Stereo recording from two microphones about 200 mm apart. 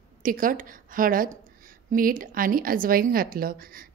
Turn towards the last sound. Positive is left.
turn(degrees=-45)  # may be behind; listen again after turning